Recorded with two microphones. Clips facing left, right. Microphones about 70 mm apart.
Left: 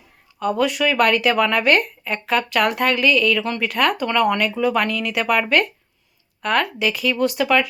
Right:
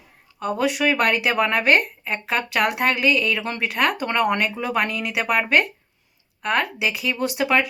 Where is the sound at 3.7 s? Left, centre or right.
Centre.